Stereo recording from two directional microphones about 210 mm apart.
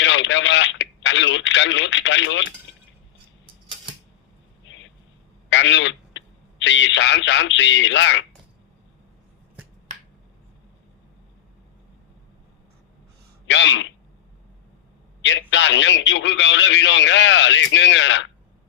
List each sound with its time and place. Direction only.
0.0 s a man's voice: 60° left (ahead or behind)
4.6 s a sound: 60° left (ahead or behind)
5.5 s speech: 60° left (ahead or behind)
13.5 s a man's voice: 60° left (ahead or behind)
15.2 s a man's voice: 60° left (ahead or behind)